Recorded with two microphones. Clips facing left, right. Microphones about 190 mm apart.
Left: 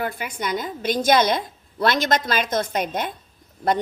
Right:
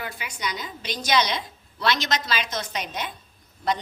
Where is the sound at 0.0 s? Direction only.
50° left (ahead or behind).